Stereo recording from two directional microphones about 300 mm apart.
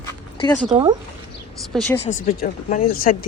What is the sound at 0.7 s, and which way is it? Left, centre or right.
Speech, centre.